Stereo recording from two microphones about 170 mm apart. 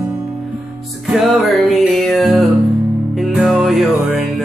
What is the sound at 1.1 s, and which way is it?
Music, centre (ahead or behind).